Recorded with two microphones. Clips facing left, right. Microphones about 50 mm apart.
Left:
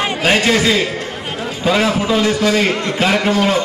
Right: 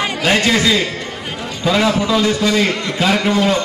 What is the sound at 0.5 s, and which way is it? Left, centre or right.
Speech, left.